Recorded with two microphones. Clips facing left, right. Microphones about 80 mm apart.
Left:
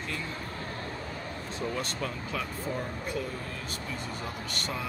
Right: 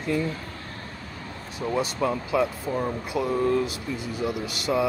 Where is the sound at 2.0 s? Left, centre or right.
Right.